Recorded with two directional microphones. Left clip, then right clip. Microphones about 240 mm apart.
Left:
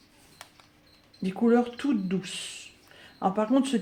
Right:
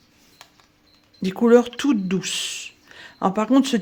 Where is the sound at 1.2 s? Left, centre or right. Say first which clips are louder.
Right 9 dB; right.